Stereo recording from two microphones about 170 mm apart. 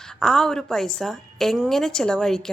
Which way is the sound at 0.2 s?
5° left (ahead or behind).